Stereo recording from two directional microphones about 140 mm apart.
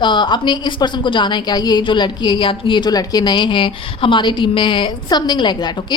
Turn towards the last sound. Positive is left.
turn(degrees=30)  # may be behind; listen again after turning